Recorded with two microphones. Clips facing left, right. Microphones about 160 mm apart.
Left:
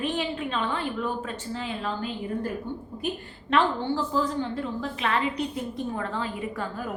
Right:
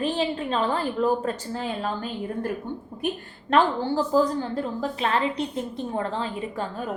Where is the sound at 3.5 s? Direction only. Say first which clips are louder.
Right 3 dB; 40° right (ahead or behind).